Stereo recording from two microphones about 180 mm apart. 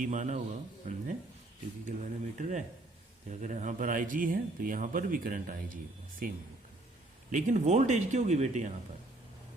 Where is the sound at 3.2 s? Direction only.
45° right (ahead or behind).